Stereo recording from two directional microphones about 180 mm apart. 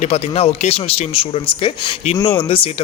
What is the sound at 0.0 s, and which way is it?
A man's voice, 35° left (ahead or behind).